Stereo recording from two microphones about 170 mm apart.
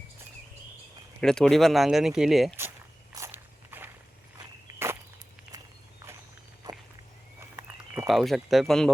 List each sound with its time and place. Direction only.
1.2 s speech: 5° left (ahead or behind)
3.2 s walk: 15° right (ahead or behind)
5.5 s walk: 5° right (ahead or behind)
6.7 s a sound: 25° right (ahead or behind)
8.0 s speech: centre (ahead or behind)